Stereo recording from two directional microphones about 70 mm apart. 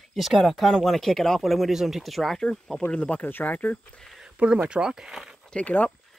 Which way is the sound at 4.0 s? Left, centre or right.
Centre.